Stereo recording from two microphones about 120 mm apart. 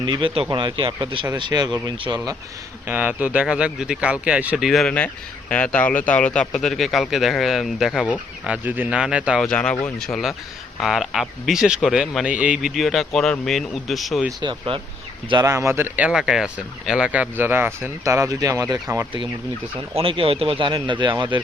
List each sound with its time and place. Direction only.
0.0 s speech: 45° right (ahead or behind)
2.8 s speech: 15° right (ahead or behind)
9.4 s speech: 10° left (ahead or behind)
14.4 s speech: 40° right (ahead or behind)
15.4 s speech: 25° right (ahead or behind)
20.0 s speech: 50° right (ahead or behind)